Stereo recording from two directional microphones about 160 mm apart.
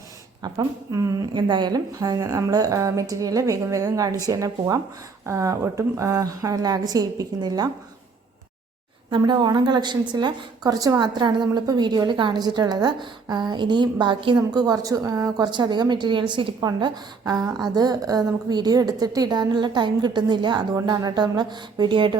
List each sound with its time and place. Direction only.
0.4 s a woman's voice: 20° right (ahead or behind)
9.0 s a woman's voice: 30° right (ahead or behind)